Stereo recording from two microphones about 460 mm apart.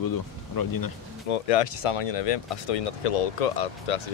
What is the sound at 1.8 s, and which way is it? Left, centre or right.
Speech, left.